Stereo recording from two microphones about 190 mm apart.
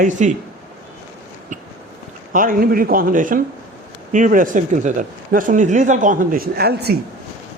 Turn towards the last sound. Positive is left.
turn(degrees=-55)  # may be behind; listen again after turning